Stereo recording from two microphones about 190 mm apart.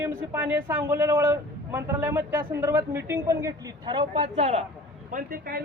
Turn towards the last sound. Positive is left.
turn(degrees=-50)  # may be behind; listen again after turning